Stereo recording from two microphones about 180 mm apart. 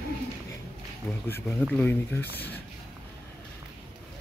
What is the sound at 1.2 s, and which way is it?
Speech, 10° left (ahead or behind).